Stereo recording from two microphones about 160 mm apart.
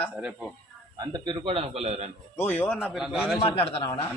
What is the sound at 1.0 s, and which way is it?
A man's voice, 25° right (ahead or behind).